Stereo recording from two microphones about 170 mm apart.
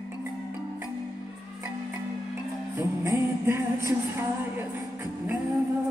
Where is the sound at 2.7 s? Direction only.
20° right (ahead or behind).